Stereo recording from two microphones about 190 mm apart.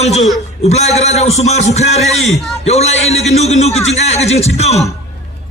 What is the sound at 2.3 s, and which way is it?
Speech, centre (ahead or behind).